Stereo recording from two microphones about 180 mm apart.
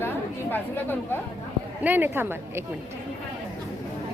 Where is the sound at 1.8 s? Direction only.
10° right (ahead or behind).